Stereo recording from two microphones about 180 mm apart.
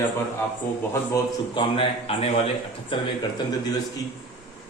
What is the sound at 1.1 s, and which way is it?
A man's voice, 30° left (ahead or behind).